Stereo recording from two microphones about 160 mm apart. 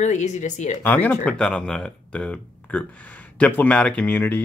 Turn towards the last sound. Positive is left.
turn(degrees=10)  # may be behind; listen again after turning